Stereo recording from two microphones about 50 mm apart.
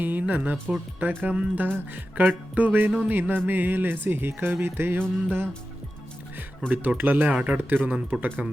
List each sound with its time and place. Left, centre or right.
0.0 s music: right
3.1 s speech: right
6.7 s music: right